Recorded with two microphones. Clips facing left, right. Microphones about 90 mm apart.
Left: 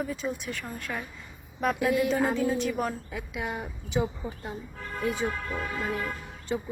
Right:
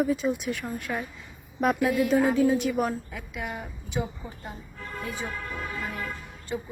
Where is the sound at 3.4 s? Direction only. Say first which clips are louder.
Left 1 dB; 20° left (ahead or behind).